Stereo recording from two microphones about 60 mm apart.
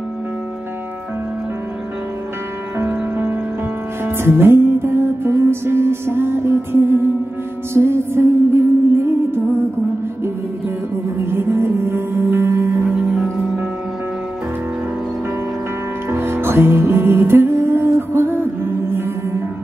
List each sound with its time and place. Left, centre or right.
4.0 s music: right
11.1 s music: right
12.9 s music: centre
16.1 s music: right